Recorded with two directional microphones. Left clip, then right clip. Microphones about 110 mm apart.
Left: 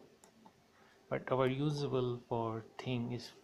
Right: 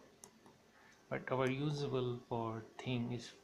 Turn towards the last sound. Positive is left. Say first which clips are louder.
# left 2 dB
turn(degrees=20)  # may be behind; listen again after turning